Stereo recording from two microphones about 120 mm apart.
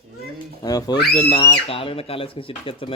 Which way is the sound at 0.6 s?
35° left (ahead or behind).